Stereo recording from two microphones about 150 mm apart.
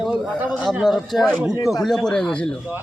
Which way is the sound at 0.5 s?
10° right (ahead or behind).